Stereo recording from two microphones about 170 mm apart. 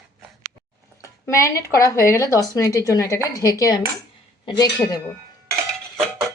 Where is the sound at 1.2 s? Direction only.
15° left (ahead or behind).